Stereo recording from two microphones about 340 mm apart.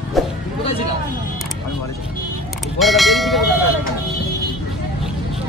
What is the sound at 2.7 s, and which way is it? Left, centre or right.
Speech, centre.